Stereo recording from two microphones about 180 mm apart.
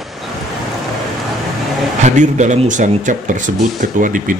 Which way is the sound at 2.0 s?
40° right (ahead or behind).